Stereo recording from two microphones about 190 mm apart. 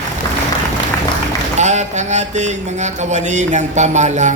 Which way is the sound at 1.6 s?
40° right (ahead or behind).